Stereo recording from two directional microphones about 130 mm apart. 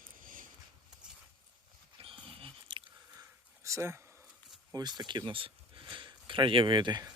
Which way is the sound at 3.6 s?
20° right (ahead or behind).